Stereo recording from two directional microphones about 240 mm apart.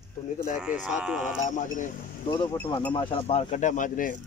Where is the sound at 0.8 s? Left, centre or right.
Centre.